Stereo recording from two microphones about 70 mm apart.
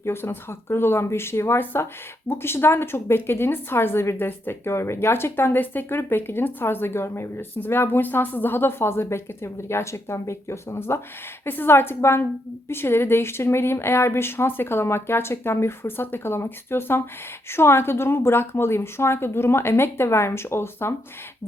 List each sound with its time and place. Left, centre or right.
0.0 s speech: left